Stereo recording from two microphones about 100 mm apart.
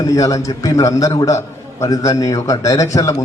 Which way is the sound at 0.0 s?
35° left (ahead or behind).